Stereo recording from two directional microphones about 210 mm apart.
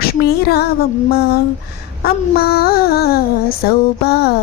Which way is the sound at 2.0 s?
50° left (ahead or behind).